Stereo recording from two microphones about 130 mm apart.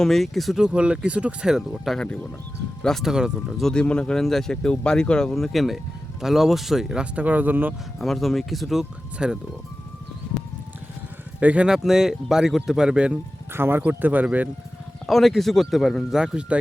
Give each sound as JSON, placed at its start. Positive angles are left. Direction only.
{"t": 0.0, "sound": "speech", "side_deg": 0}
{"t": 7.9, "sound": "speech", "side_deg": 0}
{"t": 11.3, "sound": "speech", "side_deg": -10}
{"t": 15.0, "sound": "speech", "side_deg": 0}